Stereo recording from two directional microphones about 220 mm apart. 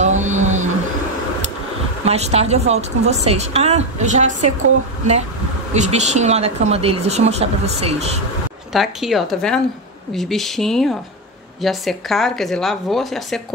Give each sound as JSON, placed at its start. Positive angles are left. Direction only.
{"t": 0.0, "sound": "a sound", "side_deg": -35}
{"t": 2.0, "sound": "speech", "side_deg": -30}
{"t": 5.7, "sound": "speech", "side_deg": -30}
{"t": 8.7, "sound": "speech", "side_deg": 0}